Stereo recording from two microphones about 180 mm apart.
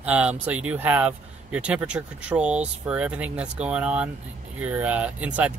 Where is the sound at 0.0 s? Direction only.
5° right (ahead or behind).